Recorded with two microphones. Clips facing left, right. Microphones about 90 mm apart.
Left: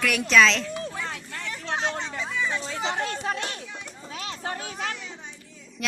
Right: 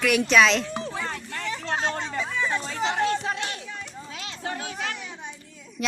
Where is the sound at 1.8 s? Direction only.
5° right (ahead or behind).